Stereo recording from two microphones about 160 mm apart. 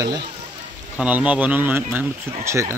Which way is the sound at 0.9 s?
10° right (ahead or behind).